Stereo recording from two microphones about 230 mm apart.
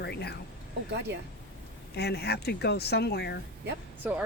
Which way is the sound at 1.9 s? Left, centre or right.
Left.